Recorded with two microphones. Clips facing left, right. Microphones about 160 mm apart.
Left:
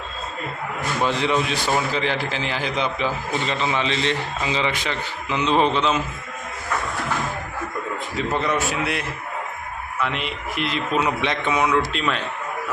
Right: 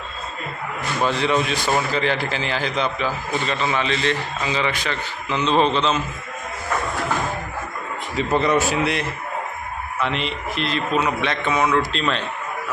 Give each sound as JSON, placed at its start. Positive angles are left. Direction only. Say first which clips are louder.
{"t": 1.0, "sound": "a man's voice", "louder": "right 1 dB", "side_deg": 15}
{"t": 8.1, "sound": "a man's voice", "louder": "right 5 dB", "side_deg": 0}